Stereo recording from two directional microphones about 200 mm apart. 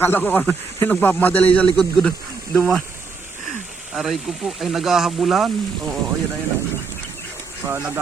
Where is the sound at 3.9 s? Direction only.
Centre (ahead or behind).